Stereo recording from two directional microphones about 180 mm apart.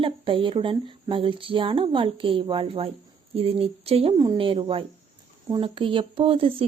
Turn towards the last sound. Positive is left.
turn(degrees=-30)  # may be behind; listen again after turning